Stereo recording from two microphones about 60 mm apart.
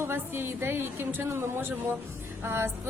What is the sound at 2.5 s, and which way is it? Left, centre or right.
Vehicle, right.